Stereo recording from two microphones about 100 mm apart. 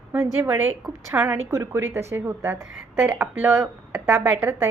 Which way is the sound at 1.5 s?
30° right (ahead or behind).